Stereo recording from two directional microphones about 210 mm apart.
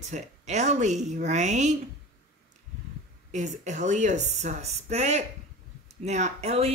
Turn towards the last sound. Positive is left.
turn(degrees=-30)  # may be behind; listen again after turning